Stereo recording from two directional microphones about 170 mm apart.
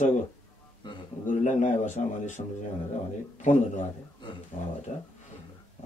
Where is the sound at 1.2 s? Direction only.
45° left (ahead or behind).